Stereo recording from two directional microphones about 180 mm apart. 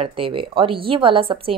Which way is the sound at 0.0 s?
30° right (ahead or behind).